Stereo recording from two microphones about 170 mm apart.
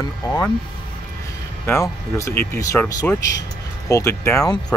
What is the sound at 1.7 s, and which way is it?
Speech, 15° left (ahead or behind).